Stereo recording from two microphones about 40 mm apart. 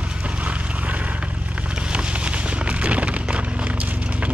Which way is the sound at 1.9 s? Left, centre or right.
Right.